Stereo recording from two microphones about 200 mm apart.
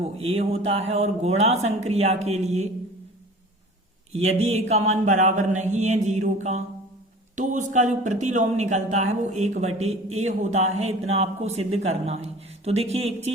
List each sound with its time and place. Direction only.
0.0 s speech: 30° right (ahead or behind)
4.1 s speech: 30° right (ahead or behind)